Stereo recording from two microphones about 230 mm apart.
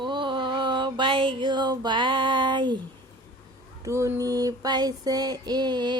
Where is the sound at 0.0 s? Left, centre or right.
Right.